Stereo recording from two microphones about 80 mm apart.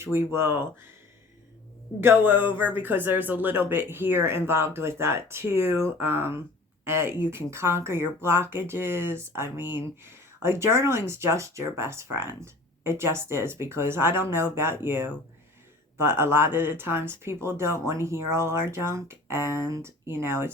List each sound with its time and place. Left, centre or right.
0.0 s speech: right
2.0 s speech: right